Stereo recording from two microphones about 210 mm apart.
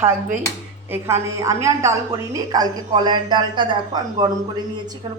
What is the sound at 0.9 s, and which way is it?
A woman's voice, 10° right (ahead or behind).